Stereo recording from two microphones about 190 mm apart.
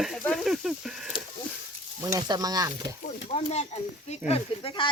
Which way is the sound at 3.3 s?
35° left (ahead or behind).